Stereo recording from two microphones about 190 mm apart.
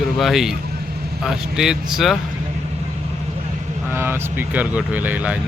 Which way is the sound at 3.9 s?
10° right (ahead or behind).